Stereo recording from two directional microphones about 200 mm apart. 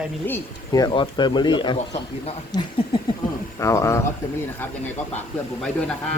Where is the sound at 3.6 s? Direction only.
15° left (ahead or behind).